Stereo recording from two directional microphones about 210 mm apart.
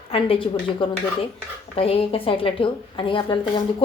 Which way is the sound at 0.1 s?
25° left (ahead or behind).